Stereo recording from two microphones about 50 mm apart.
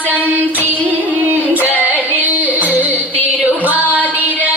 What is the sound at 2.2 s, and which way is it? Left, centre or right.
Music, right.